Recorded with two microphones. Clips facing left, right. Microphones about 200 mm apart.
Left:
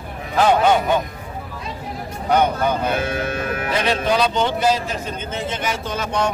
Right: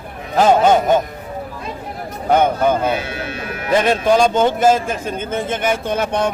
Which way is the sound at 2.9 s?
50° left (ahead or behind).